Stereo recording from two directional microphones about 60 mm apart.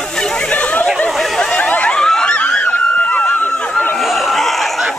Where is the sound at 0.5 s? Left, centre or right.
Left.